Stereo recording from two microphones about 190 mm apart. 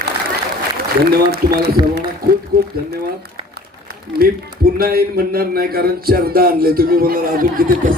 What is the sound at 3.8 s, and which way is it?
A man's voice, 50° right (ahead or behind).